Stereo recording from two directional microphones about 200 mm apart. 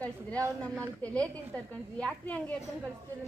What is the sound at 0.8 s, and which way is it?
A woman's voice, 5° left (ahead or behind).